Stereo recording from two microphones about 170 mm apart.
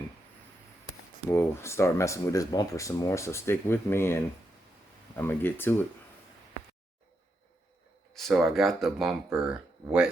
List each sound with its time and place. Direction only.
1.3 s speech: 15° left (ahead or behind)
8.1 s speech: centre (ahead or behind)